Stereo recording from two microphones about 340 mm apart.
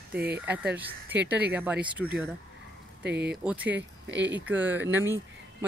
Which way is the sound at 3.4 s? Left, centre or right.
Centre.